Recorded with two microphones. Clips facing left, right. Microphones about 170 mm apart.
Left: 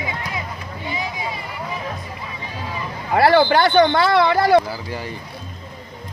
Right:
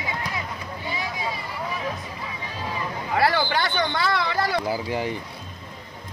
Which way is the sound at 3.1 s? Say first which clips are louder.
Left 8 dB; 65° left (ahead or behind).